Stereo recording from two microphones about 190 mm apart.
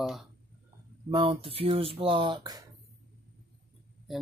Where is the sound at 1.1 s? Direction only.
30° right (ahead or behind).